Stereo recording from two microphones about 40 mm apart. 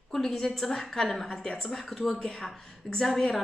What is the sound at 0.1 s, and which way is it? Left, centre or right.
A woman's voice, centre.